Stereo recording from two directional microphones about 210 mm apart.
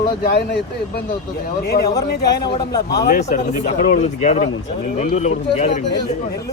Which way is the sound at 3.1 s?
35° left (ahead or behind).